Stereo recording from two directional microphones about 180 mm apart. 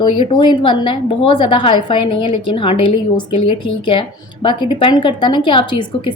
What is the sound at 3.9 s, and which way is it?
A woman's voice, 30° left (ahead or behind).